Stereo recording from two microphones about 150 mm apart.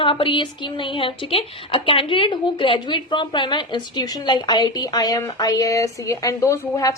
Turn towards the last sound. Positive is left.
turn(degrees=20)  # may be behind; listen again after turning